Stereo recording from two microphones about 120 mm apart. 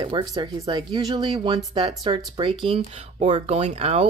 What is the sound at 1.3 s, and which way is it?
Speech, 50° right (ahead or behind).